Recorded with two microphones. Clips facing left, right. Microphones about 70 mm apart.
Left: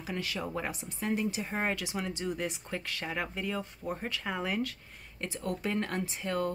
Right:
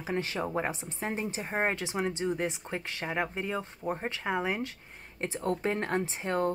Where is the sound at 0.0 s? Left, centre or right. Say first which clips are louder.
Right 4 dB; right.